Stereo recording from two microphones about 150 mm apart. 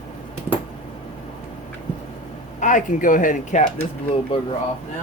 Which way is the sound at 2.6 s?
60° left (ahead or behind).